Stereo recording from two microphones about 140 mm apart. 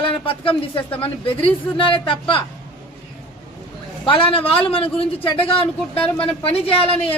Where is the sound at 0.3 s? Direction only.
40° left (ahead or behind).